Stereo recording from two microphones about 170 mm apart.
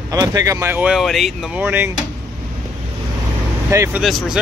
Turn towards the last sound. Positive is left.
turn(degrees=0)  # may be behind; listen again after turning